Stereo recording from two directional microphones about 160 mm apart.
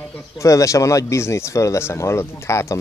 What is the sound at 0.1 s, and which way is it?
Speech, 20° left (ahead or behind).